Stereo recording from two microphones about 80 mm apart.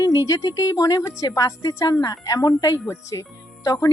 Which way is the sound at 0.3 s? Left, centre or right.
Left.